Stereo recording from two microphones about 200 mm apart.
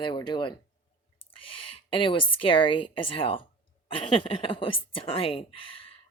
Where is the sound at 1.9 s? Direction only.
25° left (ahead or behind).